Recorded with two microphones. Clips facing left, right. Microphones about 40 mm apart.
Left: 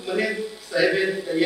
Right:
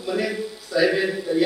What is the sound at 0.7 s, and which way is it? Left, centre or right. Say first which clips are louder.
Speech: right 1 dB; left.